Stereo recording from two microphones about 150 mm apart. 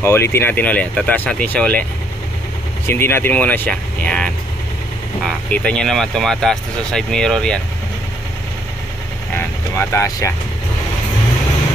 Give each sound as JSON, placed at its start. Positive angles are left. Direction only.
{"t": 0.0, "sound": "speech", "side_deg": 15}
{"t": 2.9, "sound": "speech", "side_deg": 15}
{"t": 9.8, "sound": "speech", "side_deg": 20}